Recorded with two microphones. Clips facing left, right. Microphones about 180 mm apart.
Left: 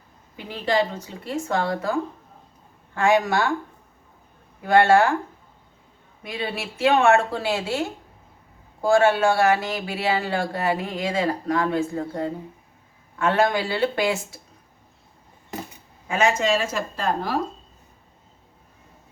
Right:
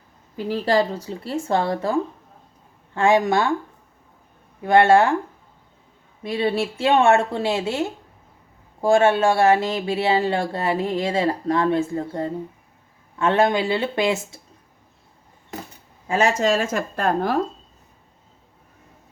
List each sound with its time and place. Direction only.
0.3 s speech: 35° right (ahead or behind)
4.6 s speech: 25° right (ahead or behind)
6.2 s speech: 30° right (ahead or behind)
16.0 s a woman's voice: 35° right (ahead or behind); by 17.3 s 55° right (ahead or behind)